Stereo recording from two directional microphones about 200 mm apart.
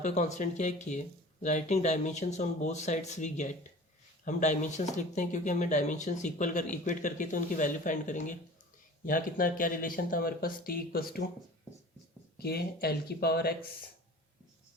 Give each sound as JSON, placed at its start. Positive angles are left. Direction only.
{"t": 0.0, "sound": "speech", "side_deg": 35}
{"t": 12.4, "sound": "speech", "side_deg": 50}